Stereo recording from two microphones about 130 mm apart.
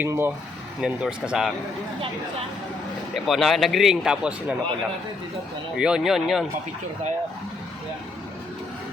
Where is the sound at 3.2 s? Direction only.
Centre (ahead or behind).